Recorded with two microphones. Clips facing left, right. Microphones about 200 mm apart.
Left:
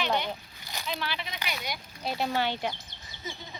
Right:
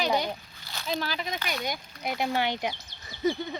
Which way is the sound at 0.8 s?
40° right (ahead or behind).